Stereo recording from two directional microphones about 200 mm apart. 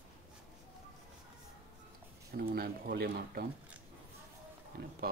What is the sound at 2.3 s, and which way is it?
Speech, 50° right (ahead or behind).